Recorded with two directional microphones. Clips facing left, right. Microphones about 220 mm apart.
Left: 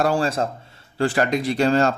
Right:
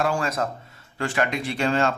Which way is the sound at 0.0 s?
35° left (ahead or behind).